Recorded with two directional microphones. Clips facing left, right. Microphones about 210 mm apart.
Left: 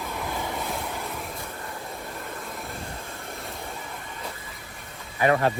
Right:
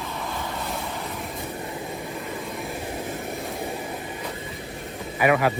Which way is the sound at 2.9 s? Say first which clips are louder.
Right 8 dB; 15° right (ahead or behind).